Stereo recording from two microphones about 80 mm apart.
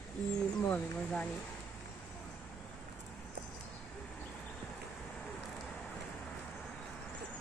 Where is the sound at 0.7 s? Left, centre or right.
Centre.